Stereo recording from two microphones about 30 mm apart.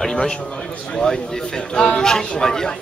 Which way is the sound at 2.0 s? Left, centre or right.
Centre.